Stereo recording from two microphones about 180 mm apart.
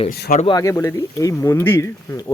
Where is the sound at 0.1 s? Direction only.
55° left (ahead or behind).